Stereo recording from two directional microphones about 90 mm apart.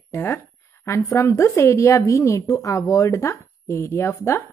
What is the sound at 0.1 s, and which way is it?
A woman's voice, 30° left (ahead or behind).